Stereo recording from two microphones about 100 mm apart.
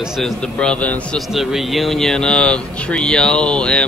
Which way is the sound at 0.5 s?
10° left (ahead or behind).